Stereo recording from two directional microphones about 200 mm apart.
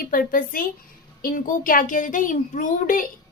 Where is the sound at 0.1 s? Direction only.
45° left (ahead or behind).